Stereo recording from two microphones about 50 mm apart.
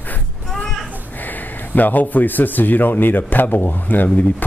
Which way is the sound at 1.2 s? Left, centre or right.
Left.